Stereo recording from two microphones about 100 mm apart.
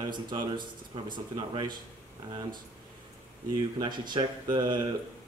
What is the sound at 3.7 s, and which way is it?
Speech, 50° right (ahead or behind).